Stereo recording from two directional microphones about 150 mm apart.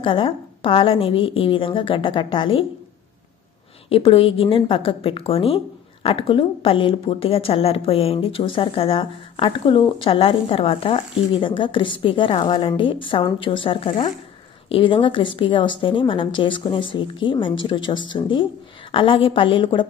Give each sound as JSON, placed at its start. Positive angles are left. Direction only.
{"t": 0.0, "sound": "speech", "side_deg": 35}
{"t": 3.9, "sound": "speech", "side_deg": 40}